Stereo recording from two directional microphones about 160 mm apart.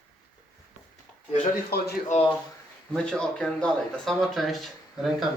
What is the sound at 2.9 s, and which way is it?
Speech, 5° left (ahead or behind).